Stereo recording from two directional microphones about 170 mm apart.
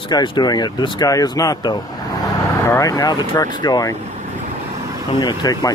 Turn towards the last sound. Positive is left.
turn(degrees=25)  # may be behind; listen again after turning